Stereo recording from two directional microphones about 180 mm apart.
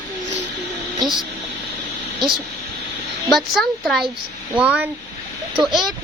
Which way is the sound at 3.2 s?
Centre (ahead or behind).